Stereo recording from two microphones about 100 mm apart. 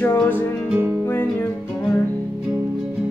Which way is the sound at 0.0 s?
20° left (ahead or behind).